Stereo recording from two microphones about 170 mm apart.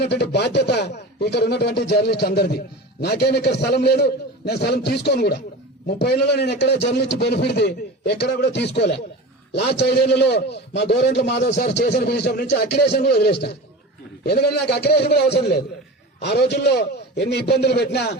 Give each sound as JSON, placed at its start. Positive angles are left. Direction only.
{"t": 0.0, "sound": "a man's voice", "side_deg": 80}